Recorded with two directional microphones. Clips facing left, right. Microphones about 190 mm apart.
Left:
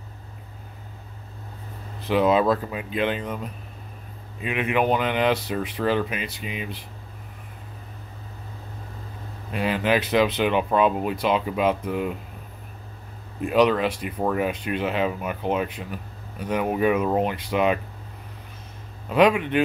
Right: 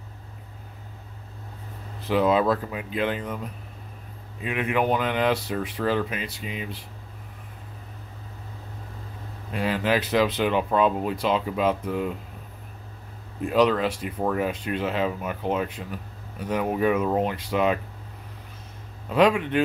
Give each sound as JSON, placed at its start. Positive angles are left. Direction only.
{"t": 2.0, "sound": "speech", "side_deg": 20}
{"t": 9.5, "sound": "speech", "side_deg": 20}
{"t": 13.4, "sound": "speech", "side_deg": 15}
{"t": 19.0, "sound": "speech", "side_deg": 15}